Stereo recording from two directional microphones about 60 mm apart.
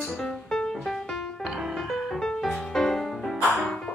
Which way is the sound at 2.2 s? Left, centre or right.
Centre.